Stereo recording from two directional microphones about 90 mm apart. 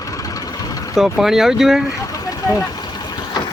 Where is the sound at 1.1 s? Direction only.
5° right (ahead or behind).